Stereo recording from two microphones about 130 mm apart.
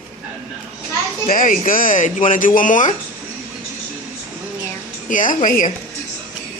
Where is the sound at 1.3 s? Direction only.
90° left.